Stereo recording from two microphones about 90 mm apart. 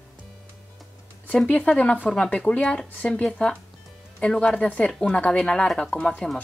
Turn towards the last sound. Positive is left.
turn(degrees=10)  # may be behind; listen again after turning